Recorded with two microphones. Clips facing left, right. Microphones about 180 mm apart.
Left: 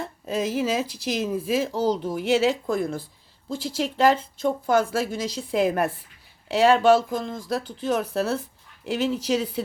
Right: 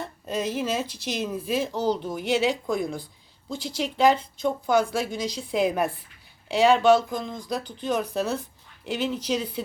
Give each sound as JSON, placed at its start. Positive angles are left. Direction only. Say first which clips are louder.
{"t": 0.0, "sound": "speech", "louder": "left 2 dB", "side_deg": 5}
{"t": 1.7, "sound": "speech", "louder": "left 1 dB", "side_deg": 35}
{"t": 2.0, "sound": "speech", "louder": "left 3 dB", "side_deg": 5}